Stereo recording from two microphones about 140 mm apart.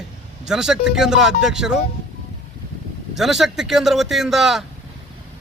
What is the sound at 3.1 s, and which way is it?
Speech, centre (ahead or behind).